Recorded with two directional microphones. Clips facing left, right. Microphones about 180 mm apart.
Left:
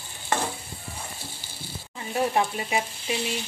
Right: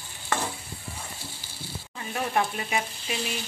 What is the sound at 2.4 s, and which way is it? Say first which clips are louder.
Frying: left 2 dB; 25° left (ahead or behind).